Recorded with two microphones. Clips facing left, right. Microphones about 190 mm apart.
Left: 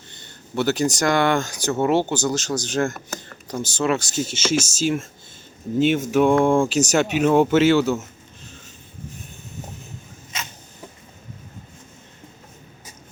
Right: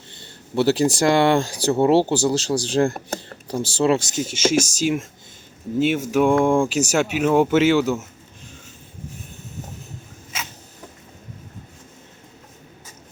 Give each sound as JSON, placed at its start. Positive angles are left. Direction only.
{"t": 0.1, "sound": "speech", "side_deg": -30}
{"t": 4.1, "sound": "speech", "side_deg": -15}